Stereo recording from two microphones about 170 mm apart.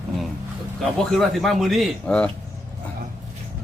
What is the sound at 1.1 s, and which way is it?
A man's voice, centre (ahead or behind).